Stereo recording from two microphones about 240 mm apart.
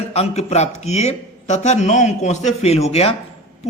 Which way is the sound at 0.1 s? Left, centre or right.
Left.